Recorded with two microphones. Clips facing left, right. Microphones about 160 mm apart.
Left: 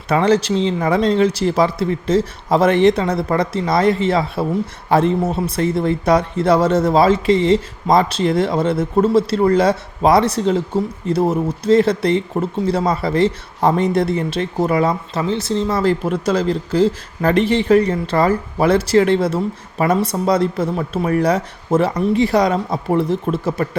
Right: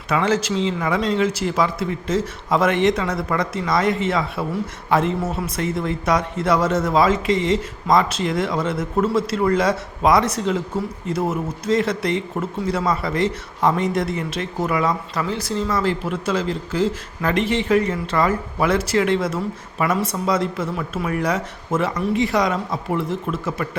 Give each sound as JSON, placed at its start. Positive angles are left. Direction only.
{"t": 0.1, "sound": "speech", "side_deg": 35}